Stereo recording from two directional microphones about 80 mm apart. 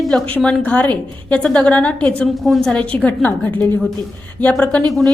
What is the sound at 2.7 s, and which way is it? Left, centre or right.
A woman's voice, centre.